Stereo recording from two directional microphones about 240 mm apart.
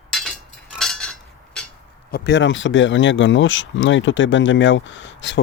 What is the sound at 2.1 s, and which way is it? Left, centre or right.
Speech, left.